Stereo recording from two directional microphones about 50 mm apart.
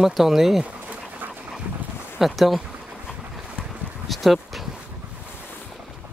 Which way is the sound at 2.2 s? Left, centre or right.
Centre.